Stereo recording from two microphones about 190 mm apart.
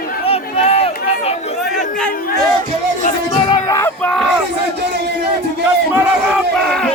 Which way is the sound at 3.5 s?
15° left (ahead or behind).